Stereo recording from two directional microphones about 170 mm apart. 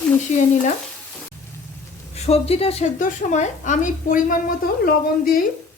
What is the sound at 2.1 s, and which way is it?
A woman's voice, 35° left (ahead or behind).